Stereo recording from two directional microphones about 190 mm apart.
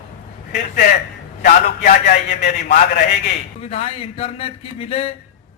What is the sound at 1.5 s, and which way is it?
A man's voice, 50° left (ahead or behind).